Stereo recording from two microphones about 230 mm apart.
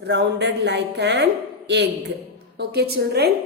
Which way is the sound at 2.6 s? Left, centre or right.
Right.